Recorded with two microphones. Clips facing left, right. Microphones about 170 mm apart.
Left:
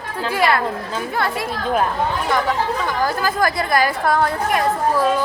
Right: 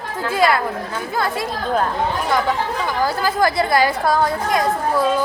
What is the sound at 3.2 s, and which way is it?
Speech, 25° right (ahead or behind).